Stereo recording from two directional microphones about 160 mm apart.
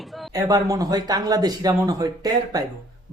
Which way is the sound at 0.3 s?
20° right (ahead or behind).